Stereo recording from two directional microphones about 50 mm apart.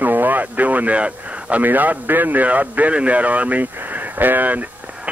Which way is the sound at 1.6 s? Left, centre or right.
Right.